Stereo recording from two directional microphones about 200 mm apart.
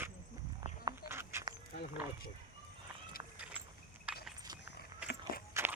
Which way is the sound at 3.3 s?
5° right (ahead or behind).